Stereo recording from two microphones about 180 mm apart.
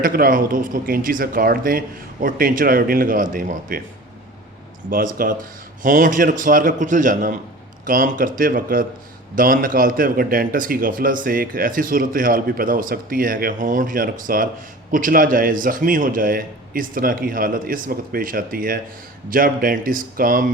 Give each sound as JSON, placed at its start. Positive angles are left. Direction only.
{"t": 0.0, "sound": "a man's voice", "side_deg": -50}
{"t": 4.9, "sound": "a man's voice", "side_deg": -55}